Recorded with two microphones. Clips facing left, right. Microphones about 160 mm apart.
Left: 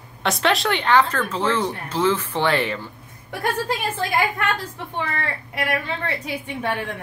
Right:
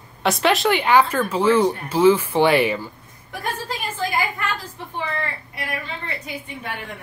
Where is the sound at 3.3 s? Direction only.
70° left (ahead or behind).